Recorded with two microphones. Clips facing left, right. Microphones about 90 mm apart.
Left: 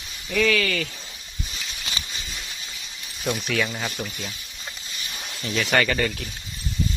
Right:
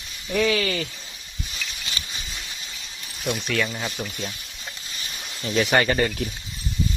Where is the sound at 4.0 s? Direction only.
5° right (ahead or behind).